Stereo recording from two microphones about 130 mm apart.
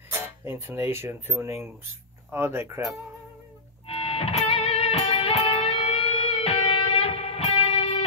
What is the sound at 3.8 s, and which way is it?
Music, 50° left (ahead or behind).